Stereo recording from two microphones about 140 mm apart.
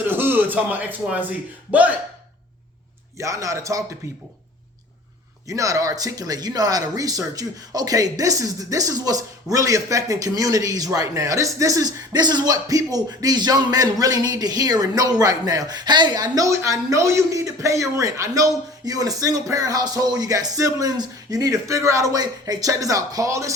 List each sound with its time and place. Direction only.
0.1 s a man's voice: 15° right (ahead or behind)
3.2 s speech: 20° right (ahead or behind)
5.5 s speech: 25° right (ahead or behind)